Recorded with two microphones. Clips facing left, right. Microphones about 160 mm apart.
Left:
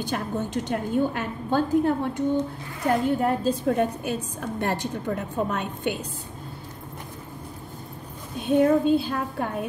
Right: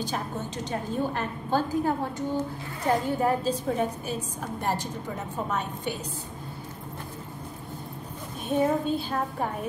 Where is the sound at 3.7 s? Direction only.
60° left (ahead or behind).